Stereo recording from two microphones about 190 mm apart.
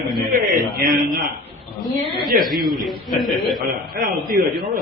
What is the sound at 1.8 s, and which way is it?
A man's voice, centre (ahead or behind).